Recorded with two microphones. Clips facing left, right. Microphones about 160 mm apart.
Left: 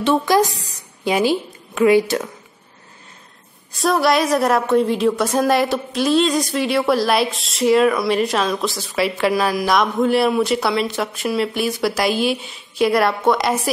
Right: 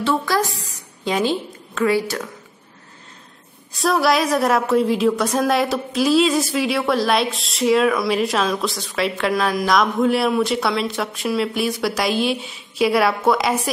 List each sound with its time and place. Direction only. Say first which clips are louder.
0.0 s a woman's voice: left 4 dB; 20° left (ahead or behind)
1.0 s a woman's voice: left 3 dB; 10° left (ahead or behind)
3.7 s a woman's voice: left 1 dB; centre (ahead or behind)